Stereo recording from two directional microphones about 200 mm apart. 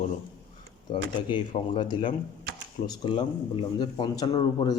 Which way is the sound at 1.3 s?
25° left (ahead or behind).